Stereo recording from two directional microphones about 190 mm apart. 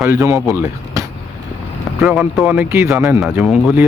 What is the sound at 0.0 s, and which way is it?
Speech, 15° right (ahead or behind).